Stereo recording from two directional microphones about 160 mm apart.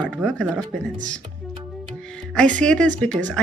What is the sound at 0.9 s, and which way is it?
Speech, 50° right (ahead or behind).